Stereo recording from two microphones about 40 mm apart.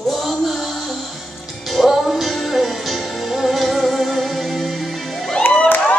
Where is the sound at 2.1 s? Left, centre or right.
Centre.